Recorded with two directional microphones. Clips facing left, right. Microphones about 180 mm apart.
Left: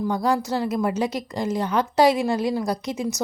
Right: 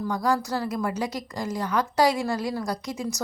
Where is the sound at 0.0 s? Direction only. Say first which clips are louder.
Left 3 dB; 25° left (ahead or behind).